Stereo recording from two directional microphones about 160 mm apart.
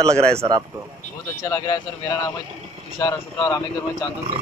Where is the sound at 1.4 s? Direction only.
20° left (ahead or behind).